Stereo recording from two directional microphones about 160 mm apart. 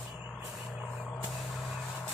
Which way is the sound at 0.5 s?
Centre (ahead or behind).